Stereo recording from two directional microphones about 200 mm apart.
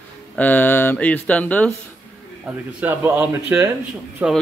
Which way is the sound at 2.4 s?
10° right (ahead or behind).